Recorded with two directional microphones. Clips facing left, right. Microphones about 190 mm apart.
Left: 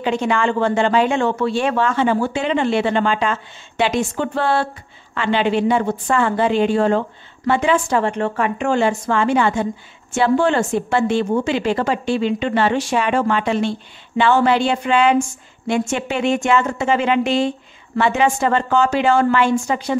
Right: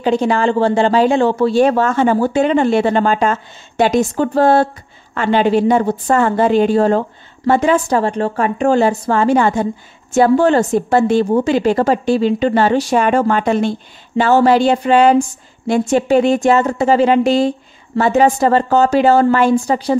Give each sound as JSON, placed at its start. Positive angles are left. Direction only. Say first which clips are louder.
{"t": 0.0, "sound": "a woman's voice", "louder": "right 4 dB", "side_deg": -35}